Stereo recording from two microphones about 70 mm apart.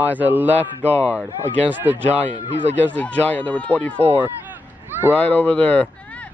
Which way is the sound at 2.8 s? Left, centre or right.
Left.